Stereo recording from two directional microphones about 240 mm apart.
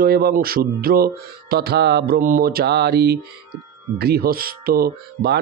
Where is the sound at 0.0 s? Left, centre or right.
Right.